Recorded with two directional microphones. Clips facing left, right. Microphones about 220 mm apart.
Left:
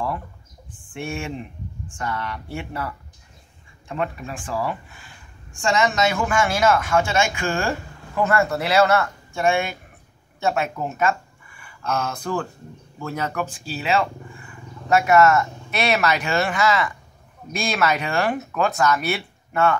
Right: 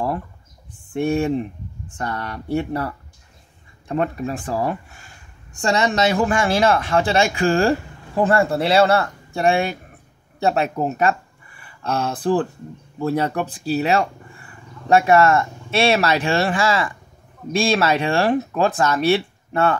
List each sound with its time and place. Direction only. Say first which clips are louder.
0.7 s speech: right 10 dB; 40° right (ahead or behind)